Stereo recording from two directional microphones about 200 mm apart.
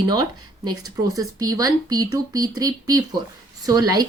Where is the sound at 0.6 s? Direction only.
20° right (ahead or behind).